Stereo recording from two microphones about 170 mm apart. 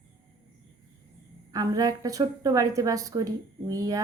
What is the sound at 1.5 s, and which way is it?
A woman's voice, 20° right (ahead or behind).